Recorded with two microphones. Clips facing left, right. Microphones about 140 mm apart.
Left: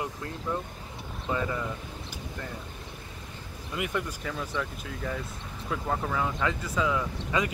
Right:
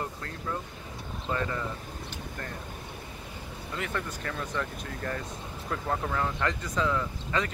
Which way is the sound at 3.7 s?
15° left (ahead or behind).